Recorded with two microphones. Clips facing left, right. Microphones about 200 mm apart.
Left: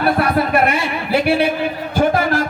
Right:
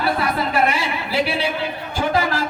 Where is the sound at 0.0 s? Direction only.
60° left (ahead or behind).